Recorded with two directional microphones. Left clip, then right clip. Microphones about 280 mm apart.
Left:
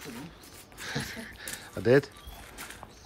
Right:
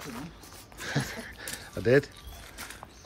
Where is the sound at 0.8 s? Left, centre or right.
Centre.